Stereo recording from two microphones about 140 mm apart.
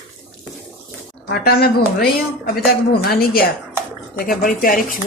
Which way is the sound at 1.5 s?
90° left.